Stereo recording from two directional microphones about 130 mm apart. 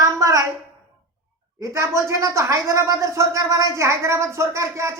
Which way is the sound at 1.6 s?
20° right (ahead or behind).